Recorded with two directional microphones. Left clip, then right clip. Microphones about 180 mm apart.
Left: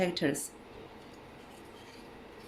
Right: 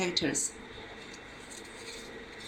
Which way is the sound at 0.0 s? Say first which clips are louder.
Even; 55° left (ahead or behind).